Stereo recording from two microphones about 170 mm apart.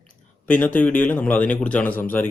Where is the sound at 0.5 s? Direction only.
10° left (ahead or behind).